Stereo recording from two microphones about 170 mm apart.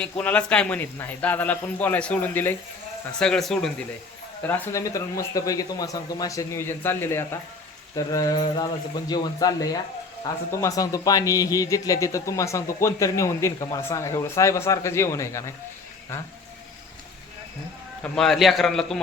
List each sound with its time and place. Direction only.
0.0 s a man's voice: 10° left (ahead or behind)
18.0 s a man's voice: centre (ahead or behind)